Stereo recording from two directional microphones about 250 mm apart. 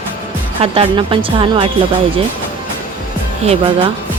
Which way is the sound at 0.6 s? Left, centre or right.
Right.